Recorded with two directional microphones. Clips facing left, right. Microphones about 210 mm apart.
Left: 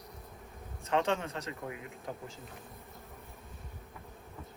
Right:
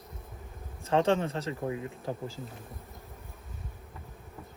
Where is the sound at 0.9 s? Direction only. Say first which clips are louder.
Right 5 dB; 30° right (ahead or behind).